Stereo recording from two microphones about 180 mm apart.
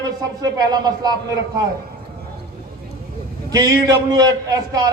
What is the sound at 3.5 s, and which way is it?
A man's voice, 20° right (ahead or behind).